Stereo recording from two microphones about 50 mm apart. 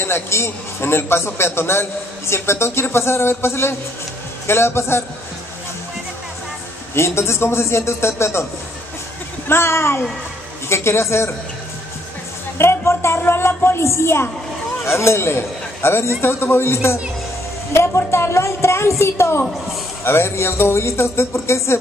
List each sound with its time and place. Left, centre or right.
0.0 s a man's voice: left
7.0 s a man's voice: left
9.5 s a man's voice: left
12.5 s a man's voice: left
14.8 s a man's voice: left